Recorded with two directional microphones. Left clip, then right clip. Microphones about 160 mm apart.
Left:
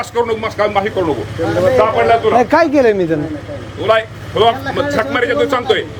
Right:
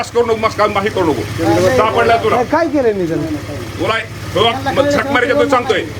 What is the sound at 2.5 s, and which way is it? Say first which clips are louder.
Speech: left 3 dB; 65° left (ahead or behind).